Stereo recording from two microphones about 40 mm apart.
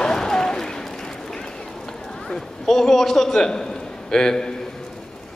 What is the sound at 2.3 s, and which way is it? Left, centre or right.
A man's voice, centre.